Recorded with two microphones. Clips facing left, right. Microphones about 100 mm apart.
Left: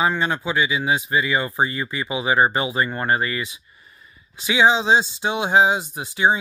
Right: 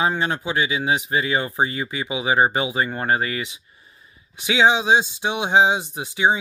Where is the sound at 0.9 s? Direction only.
20° right (ahead or behind).